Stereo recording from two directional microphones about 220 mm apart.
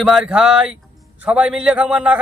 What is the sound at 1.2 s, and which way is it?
Speech, 5° right (ahead or behind).